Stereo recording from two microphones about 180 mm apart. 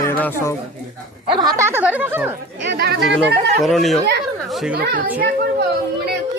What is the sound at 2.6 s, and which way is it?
Speech, 70° right (ahead or behind).